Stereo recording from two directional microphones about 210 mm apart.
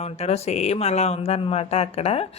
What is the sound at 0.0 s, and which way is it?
A woman's voice, 30° left (ahead or behind).